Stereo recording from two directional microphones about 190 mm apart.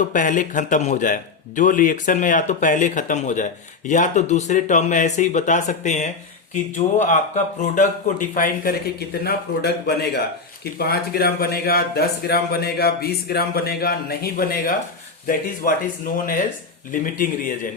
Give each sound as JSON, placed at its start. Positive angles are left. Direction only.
{"t": 0.1, "sound": "a man's voice", "side_deg": 40}
{"t": 16.9, "sound": "speech", "side_deg": 45}